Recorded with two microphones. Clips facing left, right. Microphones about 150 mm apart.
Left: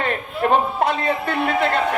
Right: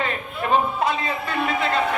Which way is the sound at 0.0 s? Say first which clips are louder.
Left 5 dB; 55° left (ahead or behind).